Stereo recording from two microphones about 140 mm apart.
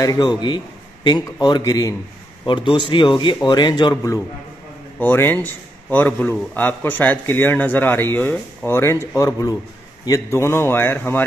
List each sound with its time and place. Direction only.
0.0 s a man's voice: 30° left (ahead or behind)
2.4 s a man's voice: 35° left (ahead or behind)
4.9 s a man's voice: 15° left (ahead or behind)